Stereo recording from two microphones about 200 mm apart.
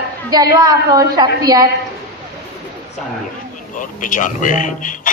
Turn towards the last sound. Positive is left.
turn(degrees=40)  # may be behind; listen again after turning